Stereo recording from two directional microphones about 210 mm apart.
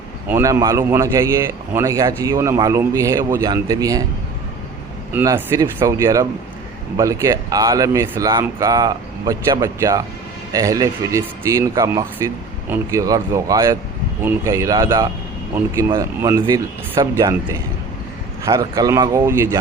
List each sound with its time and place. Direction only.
0.3 s a man's voice: 10° right (ahead or behind)
5.1 s a man's voice: 10° right (ahead or behind)